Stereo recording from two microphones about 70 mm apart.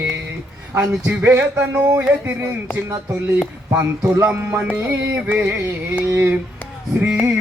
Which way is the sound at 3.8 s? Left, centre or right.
Right.